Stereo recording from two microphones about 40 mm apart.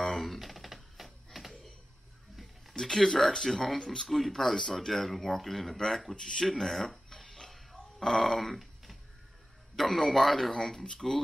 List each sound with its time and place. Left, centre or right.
0.0 s typewriter: centre
2.8 s speech: centre
6.1 s speech: centre
6.4 s a sound: centre
9.8 s speech: centre